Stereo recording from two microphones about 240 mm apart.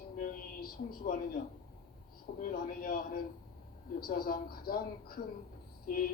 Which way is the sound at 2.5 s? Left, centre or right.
Left.